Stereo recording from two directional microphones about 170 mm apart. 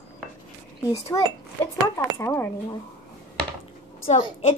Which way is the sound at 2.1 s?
15° left (ahead or behind).